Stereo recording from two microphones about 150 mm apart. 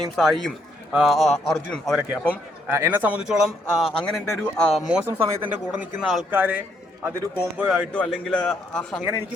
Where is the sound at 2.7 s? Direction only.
15° right (ahead or behind).